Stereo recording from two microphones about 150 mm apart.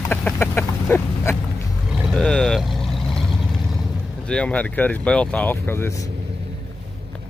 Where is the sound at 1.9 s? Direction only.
5° right (ahead or behind).